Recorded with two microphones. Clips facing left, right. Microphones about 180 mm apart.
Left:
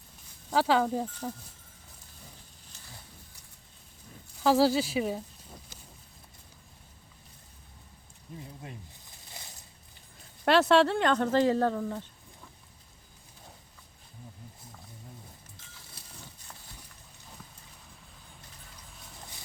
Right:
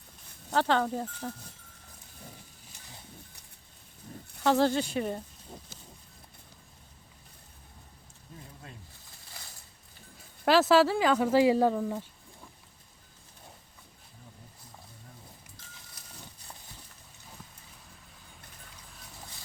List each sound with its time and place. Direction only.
0.5 s speech: 5° left (ahead or behind)
4.4 s speech: 5° left (ahead or behind)
5.5 s a sound: 25° right (ahead or behind)
8.3 s speech: 15° left (ahead or behind)
9.4 s a sound: 20° left (ahead or behind)
10.2 s speech: centre (ahead or behind)
18.9 s horse: centre (ahead or behind)